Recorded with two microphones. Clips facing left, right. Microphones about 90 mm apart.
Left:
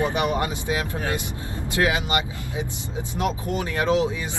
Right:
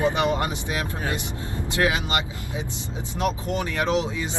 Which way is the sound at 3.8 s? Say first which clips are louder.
Left 3 dB; 25° right (ahead or behind).